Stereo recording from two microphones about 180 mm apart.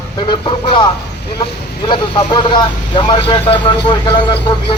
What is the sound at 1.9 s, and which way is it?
Speech, 25° left (ahead or behind).